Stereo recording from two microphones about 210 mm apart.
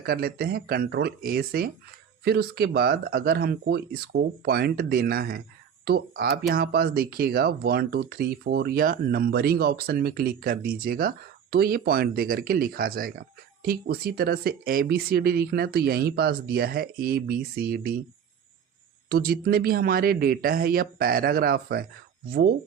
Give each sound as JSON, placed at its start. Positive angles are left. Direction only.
{"t": 0.0, "sound": "speech", "side_deg": -45}
{"t": 19.0, "sound": "speech", "side_deg": -45}